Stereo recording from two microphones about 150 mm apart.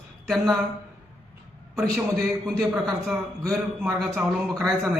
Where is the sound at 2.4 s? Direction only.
Centre (ahead or behind).